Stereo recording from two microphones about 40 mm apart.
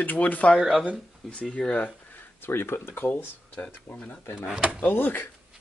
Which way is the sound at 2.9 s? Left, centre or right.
Left.